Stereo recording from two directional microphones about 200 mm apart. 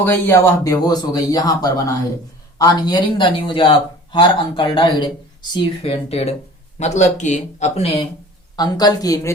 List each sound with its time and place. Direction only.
0.0 s speech: 10° left (ahead or behind); by 8.0 s 30° left (ahead or behind)
8.5 s speech: 20° left (ahead or behind)